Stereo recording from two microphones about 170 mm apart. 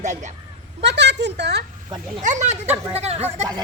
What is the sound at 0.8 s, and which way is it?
Speech, 85° right.